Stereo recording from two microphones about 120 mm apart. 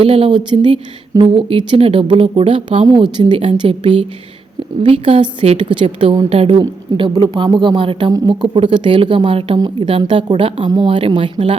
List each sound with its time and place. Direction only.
0.0 s a woman's voice: 50° right (ahead or behind)
8.1 s speech: 30° right (ahead or behind)
8.5 s a woman's voice: 45° right (ahead or behind)